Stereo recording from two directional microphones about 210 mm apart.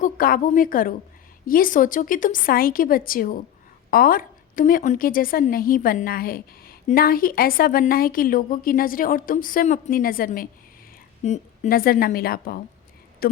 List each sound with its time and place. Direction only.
0.0 s a woman's voice: 45° left (ahead or behind)